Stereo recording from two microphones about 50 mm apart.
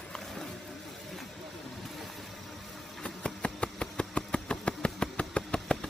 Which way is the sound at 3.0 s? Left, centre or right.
Centre.